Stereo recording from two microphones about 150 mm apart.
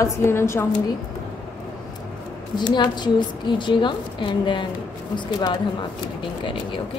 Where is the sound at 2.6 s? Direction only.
30° left (ahead or behind).